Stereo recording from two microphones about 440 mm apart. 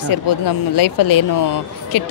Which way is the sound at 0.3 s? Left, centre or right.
Left.